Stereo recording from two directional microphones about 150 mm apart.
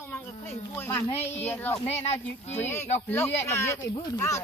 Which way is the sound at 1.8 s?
45° left (ahead or behind).